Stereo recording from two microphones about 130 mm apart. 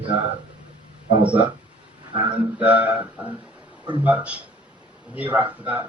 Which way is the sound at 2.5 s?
10° right (ahead or behind).